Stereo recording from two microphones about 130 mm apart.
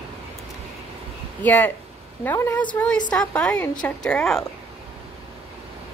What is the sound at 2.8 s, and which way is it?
Speech, 20° left (ahead or behind).